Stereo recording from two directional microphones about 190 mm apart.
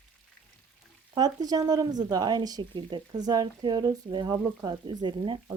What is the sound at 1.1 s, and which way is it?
A woman's voice, 20° right (ahead or behind).